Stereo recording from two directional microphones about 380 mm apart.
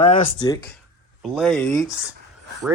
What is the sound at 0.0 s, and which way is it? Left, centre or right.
Speech, centre.